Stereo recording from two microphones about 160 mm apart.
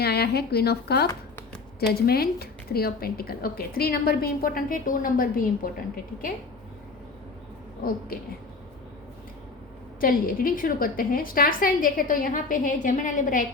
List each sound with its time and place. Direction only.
0.0 s a woman's voice: 85° left; by 5.7 s 60° left (ahead or behind)
7.8 s a woman's voice: 65° left (ahead or behind)
10.0 s a woman's voice: 65° left (ahead or behind)